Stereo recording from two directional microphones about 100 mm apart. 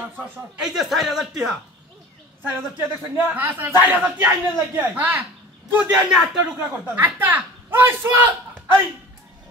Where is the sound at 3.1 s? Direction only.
15° right (ahead or behind).